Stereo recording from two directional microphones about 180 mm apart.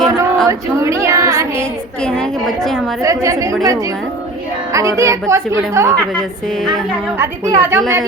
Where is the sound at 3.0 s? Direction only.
15° right (ahead or behind).